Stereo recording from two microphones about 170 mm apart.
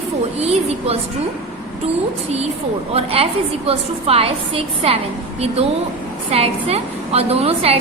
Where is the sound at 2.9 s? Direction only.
35° right (ahead or behind).